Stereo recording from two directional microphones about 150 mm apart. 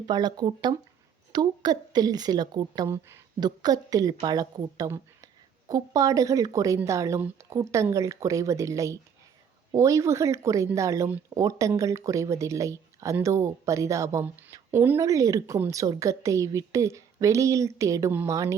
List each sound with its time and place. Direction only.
0.0 s speech: 30° right (ahead or behind)